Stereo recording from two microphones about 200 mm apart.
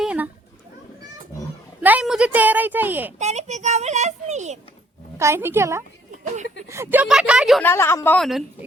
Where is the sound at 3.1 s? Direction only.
35° right (ahead or behind).